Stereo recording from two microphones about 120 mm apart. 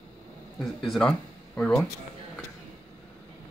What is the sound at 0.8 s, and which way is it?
Speech, 5° left (ahead or behind).